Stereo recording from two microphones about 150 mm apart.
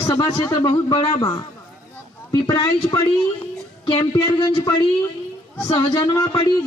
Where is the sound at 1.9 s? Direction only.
20° left (ahead or behind).